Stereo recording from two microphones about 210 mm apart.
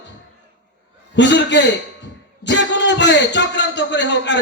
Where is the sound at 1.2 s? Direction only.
55° left (ahead or behind).